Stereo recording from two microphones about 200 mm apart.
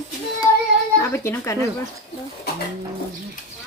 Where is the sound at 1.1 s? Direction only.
15° left (ahead or behind).